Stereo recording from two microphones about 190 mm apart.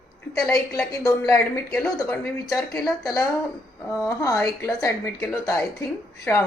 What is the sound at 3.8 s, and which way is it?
A woman's voice, 15° left (ahead or behind).